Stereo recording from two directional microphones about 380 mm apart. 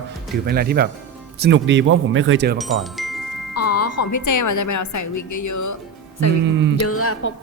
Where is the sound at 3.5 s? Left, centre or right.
Left.